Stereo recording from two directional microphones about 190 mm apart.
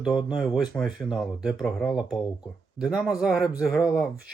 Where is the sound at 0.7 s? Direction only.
10° left (ahead or behind).